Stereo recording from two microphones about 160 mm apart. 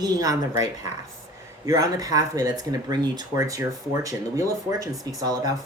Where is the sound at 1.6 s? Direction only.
20° right (ahead or behind).